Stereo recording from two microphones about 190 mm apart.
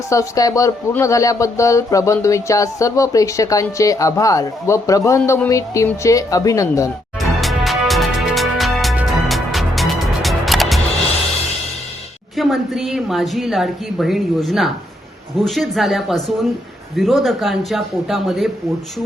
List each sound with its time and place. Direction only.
0.1 s a woman's voice: 15° left (ahead or behind)
7.2 s music: centre (ahead or behind)
12.4 s a woman's voice: centre (ahead or behind)